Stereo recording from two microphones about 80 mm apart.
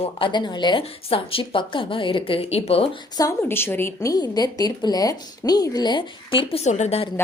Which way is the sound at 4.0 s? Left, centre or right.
Left.